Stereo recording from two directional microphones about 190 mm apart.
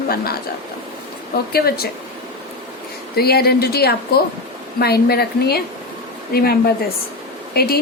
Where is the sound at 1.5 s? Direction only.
55° left (ahead or behind).